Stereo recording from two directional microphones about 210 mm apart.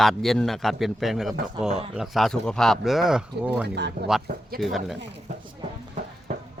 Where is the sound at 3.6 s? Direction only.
55° right (ahead or behind).